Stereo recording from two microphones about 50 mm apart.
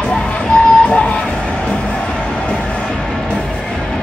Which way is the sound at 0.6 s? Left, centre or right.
Left.